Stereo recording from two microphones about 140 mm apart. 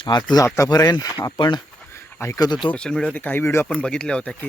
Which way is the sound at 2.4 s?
35° left (ahead or behind).